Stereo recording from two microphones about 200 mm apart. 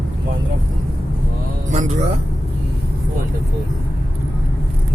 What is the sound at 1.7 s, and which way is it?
Vehicle, 35° right (ahead or behind).